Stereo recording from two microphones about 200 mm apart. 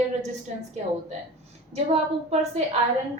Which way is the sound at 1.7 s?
30° right (ahead or behind).